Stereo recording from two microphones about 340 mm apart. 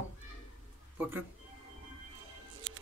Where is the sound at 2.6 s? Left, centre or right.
Right.